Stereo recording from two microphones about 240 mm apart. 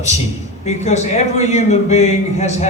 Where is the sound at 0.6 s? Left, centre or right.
Left.